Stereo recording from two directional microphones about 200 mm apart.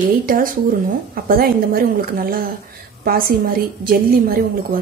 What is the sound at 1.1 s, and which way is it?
A woman's voice, 45° right (ahead or behind).